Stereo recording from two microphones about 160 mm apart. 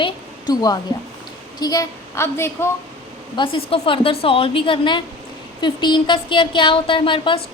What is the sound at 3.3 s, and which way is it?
A woman's voice, 30° left (ahead or behind).